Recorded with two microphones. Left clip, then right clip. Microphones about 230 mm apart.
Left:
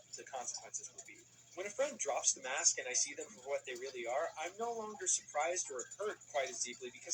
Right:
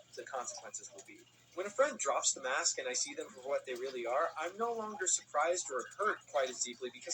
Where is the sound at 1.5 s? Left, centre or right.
Centre.